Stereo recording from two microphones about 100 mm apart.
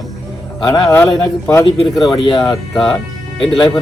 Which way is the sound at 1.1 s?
30° left (ahead or behind).